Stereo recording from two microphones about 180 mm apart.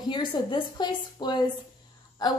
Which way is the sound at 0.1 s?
25° left (ahead or behind).